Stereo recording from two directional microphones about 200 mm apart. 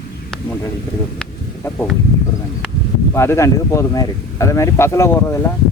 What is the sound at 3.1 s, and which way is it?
Speech, 15° left (ahead or behind).